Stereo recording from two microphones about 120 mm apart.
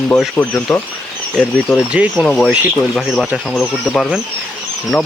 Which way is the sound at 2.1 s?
5° left (ahead or behind).